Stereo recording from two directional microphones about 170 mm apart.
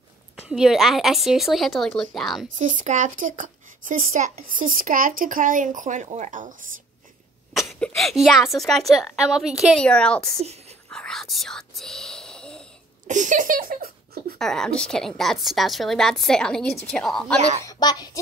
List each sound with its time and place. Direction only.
0.5 s a woman's voice: centre (ahead or behind)
2.8 s speech: 50° right (ahead or behind)
7.5 s a woman's voice: centre (ahead or behind)
10.4 s whispering: 40° right (ahead or behind)
10.9 s speech: 5° left (ahead or behind)
13.0 s speech: 50° right (ahead or behind)
14.4 s a woman's voice: 5° left (ahead or behind)
17.6 s speech: 25° left (ahead or behind)